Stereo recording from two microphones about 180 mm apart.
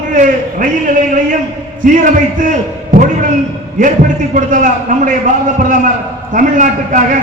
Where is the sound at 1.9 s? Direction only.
45° right (ahead or behind).